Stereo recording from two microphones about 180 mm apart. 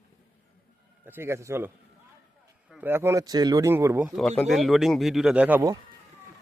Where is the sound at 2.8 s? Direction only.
10° right (ahead or behind).